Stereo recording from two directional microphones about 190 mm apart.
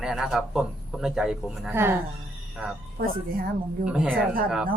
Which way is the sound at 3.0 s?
50° right (ahead or behind).